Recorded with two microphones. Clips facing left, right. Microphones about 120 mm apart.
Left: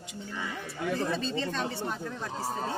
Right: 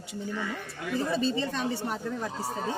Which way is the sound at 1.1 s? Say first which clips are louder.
Right 3 dB; 10° right (ahead or behind).